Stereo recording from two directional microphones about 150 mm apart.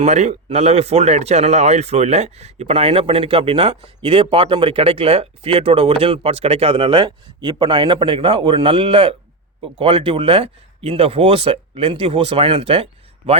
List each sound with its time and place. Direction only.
0.0 s speech: 50° right (ahead or behind)